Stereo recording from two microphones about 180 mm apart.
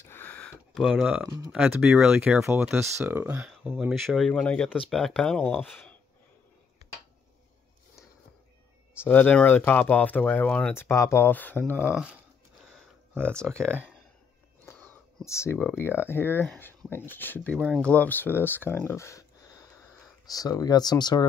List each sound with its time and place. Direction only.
0.0 s a sound: 10° left (ahead or behind)
1.2 s speech: 10° right (ahead or behind); by 5.9 s 10° left (ahead or behind)
9.0 s speech: 10° left (ahead or behind)
11.9 s speech: 5° right (ahead or behind)
12.7 s a sound: 10° right (ahead or behind)
14.7 s a sound: 10° left (ahead or behind)
15.8 s speech: 10° left (ahead or behind)
17.6 s speech: 5° right (ahead or behind)
17.8 s speech: 10° left (ahead or behind)